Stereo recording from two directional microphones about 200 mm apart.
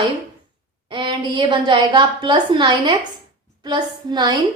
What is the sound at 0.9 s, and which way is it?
A woman's voice, 25° right (ahead or behind).